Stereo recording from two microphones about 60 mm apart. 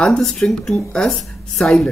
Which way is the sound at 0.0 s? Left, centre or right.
Centre.